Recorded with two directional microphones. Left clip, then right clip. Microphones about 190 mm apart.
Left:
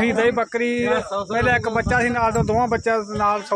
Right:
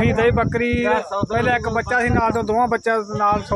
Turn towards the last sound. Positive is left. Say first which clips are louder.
# right 1 dB
turn(degrees=-10)  # may be behind; listen again after turning